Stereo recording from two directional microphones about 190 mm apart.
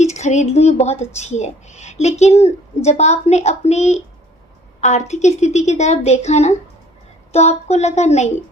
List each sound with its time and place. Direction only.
0.0 s a woman's voice: 35° left (ahead or behind)